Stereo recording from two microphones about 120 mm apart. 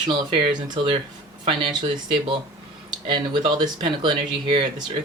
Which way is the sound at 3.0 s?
45° right (ahead or behind).